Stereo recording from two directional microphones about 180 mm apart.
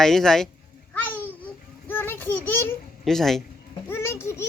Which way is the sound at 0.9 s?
10° left (ahead or behind).